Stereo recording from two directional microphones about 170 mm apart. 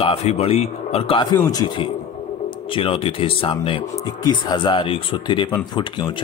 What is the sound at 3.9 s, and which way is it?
Speech, 20° left (ahead or behind).